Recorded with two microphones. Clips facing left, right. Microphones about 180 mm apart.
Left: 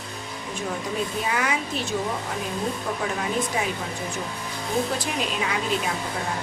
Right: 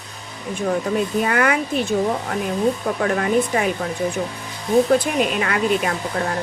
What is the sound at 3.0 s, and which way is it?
Speech, 60° right (ahead or behind).